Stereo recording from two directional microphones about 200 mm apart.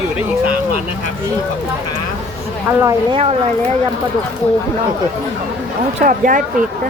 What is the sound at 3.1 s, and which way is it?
Speech, 30° right (ahead or behind).